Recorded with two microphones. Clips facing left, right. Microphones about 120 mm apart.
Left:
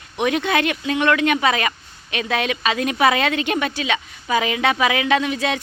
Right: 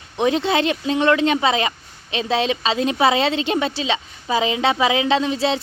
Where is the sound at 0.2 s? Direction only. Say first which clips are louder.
Right 1 dB; 25° right (ahead or behind).